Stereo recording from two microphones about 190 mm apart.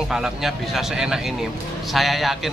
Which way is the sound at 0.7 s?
5° right (ahead or behind).